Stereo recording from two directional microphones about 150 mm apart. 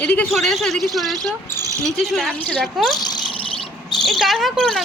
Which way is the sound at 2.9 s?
30° left (ahead or behind).